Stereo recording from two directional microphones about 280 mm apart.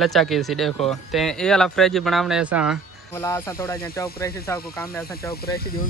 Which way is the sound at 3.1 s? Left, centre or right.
Centre.